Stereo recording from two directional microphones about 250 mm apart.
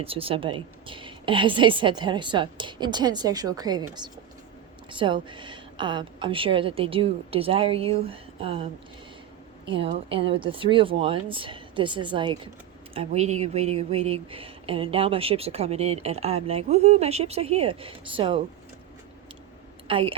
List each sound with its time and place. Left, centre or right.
0.0 s speech: right
9.6 s speech: right
19.9 s speech: right